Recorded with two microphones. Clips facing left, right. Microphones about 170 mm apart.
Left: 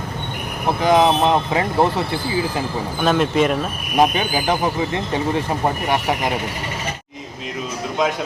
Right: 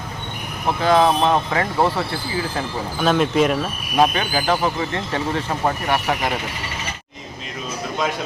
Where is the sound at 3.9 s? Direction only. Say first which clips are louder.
Left 1 dB; 15° left (ahead or behind).